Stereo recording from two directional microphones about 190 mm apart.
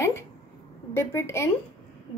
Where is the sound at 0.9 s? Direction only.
15° left (ahead or behind).